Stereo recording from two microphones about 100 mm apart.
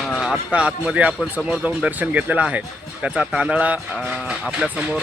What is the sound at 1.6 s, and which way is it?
Speech, 15° right (ahead or behind).